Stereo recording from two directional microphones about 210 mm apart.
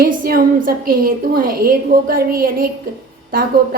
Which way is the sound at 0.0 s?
45° right (ahead or behind).